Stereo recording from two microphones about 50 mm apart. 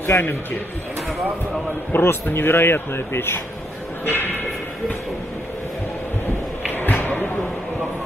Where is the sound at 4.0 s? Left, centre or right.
Left.